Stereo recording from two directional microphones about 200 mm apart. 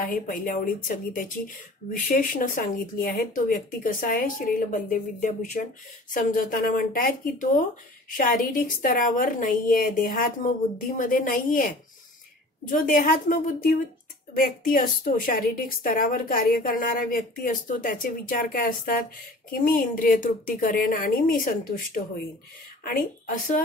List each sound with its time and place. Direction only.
0.0 s a woman's voice: 45° left (ahead or behind)